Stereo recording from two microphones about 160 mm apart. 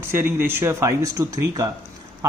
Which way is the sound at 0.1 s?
15° right (ahead or behind).